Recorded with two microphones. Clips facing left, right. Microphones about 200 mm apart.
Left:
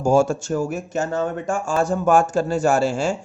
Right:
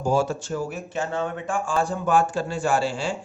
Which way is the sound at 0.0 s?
45° left (ahead or behind).